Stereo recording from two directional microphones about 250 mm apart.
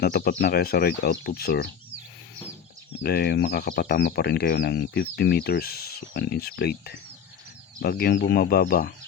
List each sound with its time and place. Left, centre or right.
0.0 s speech: left
3.0 s speech: left